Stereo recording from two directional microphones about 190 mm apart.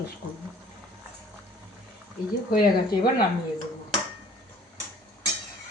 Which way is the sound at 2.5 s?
50° left (ahead or behind).